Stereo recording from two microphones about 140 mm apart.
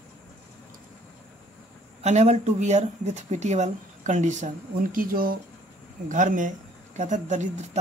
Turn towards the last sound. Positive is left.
turn(degrees=-60)  # may be behind; listen again after turning